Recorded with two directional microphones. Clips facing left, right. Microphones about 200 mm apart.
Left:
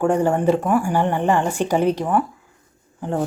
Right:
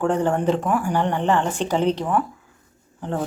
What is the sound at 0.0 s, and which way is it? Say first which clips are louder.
Speech: left 3 dB; 10° left (ahead or behind).